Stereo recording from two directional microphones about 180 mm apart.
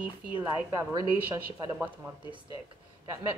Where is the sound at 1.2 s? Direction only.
10° right (ahead or behind).